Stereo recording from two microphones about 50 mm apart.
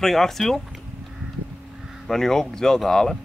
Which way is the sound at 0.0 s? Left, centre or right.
Centre.